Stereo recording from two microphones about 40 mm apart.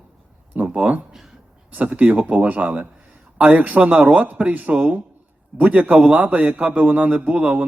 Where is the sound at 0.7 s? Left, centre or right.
Right.